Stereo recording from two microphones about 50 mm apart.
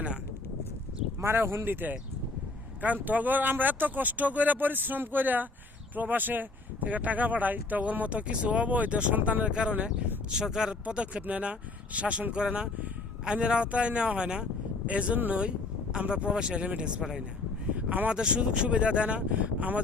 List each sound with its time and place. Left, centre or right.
1.2 s speech: right
1.6 s speech: right
9.5 s speech: right
10.8 s speech: right
17.7 s a sound: right
18.1 s speech: centre